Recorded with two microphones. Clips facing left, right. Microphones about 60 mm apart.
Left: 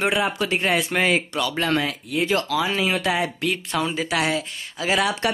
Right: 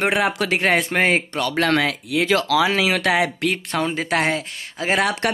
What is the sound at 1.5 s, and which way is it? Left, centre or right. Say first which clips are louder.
Speech: right 6 dB; right.